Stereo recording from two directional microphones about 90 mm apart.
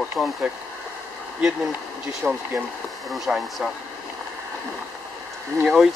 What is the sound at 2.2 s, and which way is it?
Speech, 20° right (ahead or behind).